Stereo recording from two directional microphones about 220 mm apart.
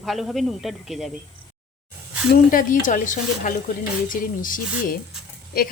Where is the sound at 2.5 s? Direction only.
35° left (ahead or behind).